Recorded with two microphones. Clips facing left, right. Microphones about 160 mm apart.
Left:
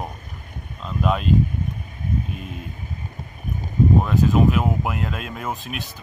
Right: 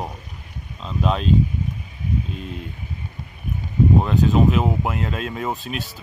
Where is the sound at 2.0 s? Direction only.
50° left (ahead or behind).